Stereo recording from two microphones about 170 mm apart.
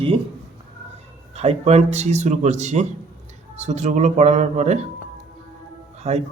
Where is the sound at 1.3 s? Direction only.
40° right (ahead or behind).